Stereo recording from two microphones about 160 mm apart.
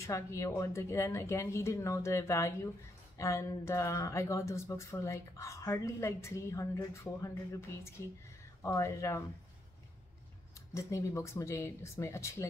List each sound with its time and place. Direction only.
0.0 s speech: 20° left (ahead or behind)
10.7 s speech: 20° left (ahead or behind)